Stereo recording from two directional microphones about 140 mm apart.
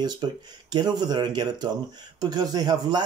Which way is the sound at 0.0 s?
30° right (ahead or behind).